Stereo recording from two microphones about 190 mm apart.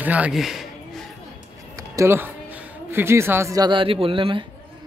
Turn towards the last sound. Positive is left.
turn(degrees=-25)  # may be behind; listen again after turning